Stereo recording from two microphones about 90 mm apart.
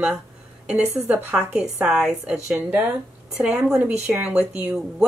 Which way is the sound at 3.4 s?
10° right (ahead or behind).